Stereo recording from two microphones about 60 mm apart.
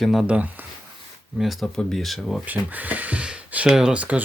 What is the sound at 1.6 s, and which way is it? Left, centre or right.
Speech, centre.